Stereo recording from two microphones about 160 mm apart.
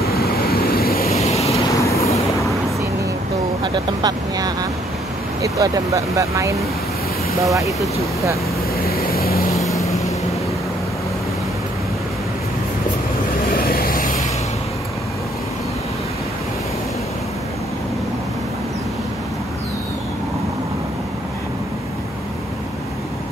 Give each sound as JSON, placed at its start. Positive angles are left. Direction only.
{"t": 0.0, "sound": "vehicle", "side_deg": 75}
{"t": 1.1, "sound": "vehicle", "side_deg": 40}
{"t": 1.7, "sound": "vehicle", "side_deg": 20}
{"t": 3.6, "sound": "speech", "side_deg": -25}
{"t": 8.8, "sound": "vehicle", "side_deg": 75}
{"t": 9.7, "sound": "vehicle", "side_deg": 20}
{"t": 13.5, "sound": "vehicle", "side_deg": 70}